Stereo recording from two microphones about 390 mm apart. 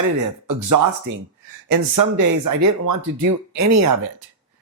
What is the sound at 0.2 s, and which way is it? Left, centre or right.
Speech, right.